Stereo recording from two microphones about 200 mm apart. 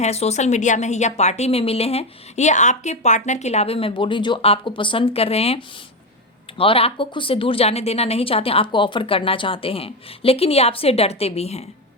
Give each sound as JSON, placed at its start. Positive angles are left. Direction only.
{"t": 0.0, "sound": "a woman's voice", "side_deg": 35}